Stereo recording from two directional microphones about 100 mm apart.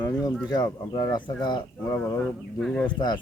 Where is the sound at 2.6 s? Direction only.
5° left (ahead or behind).